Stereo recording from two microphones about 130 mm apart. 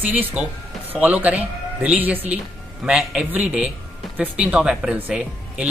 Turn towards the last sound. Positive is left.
turn(degrees=-10)  # may be behind; listen again after turning